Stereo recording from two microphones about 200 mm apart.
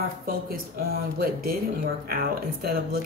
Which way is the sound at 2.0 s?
45° right (ahead or behind).